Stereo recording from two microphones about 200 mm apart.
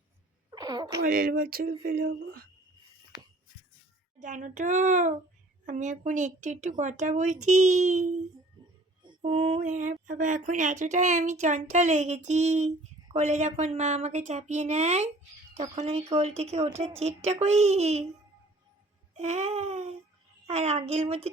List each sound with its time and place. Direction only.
0.5 s a sound: 20° right (ahead or behind)
1.0 s a sound: 45° right (ahead or behind)
4.2 s speech: 40° right (ahead or behind)
8.6 s music: 20° right (ahead or behind)
9.3 s speech: 35° right (ahead or behind)
19.1 s speech: 35° right (ahead or behind)